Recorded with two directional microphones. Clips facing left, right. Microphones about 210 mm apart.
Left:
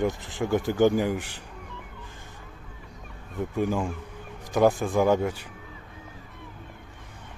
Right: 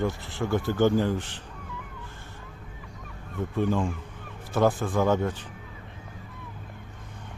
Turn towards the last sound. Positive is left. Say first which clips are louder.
# left 2 dB
turn(degrees=10)  # may be behind; listen again after turning